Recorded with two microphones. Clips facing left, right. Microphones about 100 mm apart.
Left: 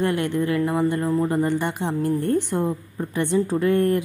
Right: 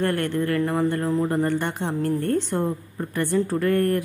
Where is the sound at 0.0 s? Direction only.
15° left (ahead or behind).